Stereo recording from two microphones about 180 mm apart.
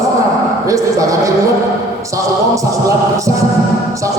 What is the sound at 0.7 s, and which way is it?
Speech, 20° right (ahead or behind).